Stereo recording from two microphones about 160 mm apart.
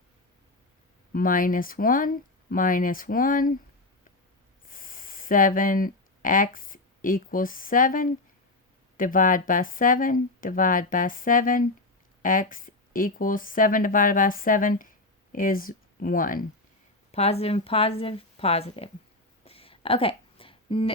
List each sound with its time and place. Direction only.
1.1 s speech: 60° left (ahead or behind)
4.6 s a woman's voice: 60° left (ahead or behind)
17.1 s speech: 40° left (ahead or behind)
19.5 s a sound: 35° left (ahead or behind)